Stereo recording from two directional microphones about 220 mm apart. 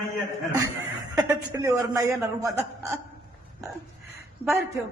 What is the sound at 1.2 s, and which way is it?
A man's voice, 15° right (ahead or behind).